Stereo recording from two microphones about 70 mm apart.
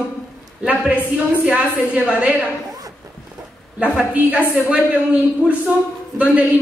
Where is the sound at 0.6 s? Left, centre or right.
Centre.